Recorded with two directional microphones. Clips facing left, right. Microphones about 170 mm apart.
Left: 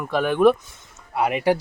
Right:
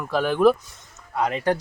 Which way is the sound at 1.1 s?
10° left (ahead or behind).